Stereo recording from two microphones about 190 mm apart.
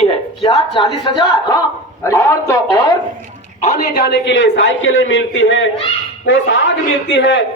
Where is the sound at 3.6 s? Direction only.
40° left (ahead or behind).